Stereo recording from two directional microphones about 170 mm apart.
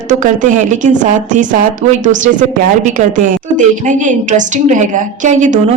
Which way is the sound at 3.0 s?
35° right (ahead or behind).